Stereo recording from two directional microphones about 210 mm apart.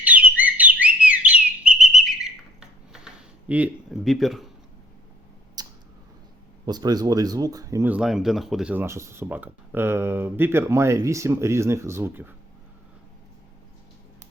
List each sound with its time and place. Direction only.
0.0 s bird: 5° right (ahead or behind)
5.6 s a sound: 20° right (ahead or behind)
6.7 s speech: 20° right (ahead or behind)